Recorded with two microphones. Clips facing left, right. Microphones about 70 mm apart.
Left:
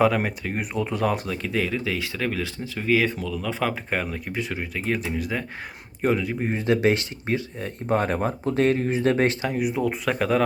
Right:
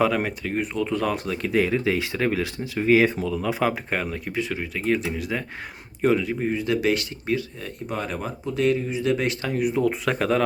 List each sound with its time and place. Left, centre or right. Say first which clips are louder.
0.0 s speech: left 1 dB; centre
1.5 s speech: right 5 dB; centre
3.8 s speech: even; centre
6.4 s speech: left 1 dB; left
7.9 s speech: left 7 dB; left
9.4 s speech: right 2 dB; centre